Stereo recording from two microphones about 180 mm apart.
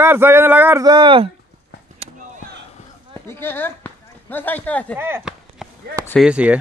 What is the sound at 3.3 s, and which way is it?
Speech, 10° left (ahead or behind).